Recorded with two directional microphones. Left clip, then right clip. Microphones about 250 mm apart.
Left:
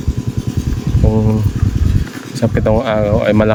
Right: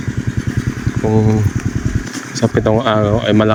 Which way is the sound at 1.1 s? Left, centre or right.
Centre.